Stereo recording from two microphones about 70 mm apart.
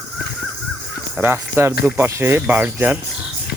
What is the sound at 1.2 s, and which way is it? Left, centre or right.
Speech, right.